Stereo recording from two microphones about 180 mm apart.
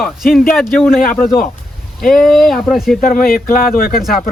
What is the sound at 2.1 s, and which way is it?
Speech, centre (ahead or behind).